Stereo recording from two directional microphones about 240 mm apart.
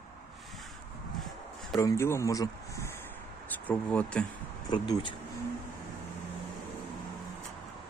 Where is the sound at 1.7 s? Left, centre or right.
Centre.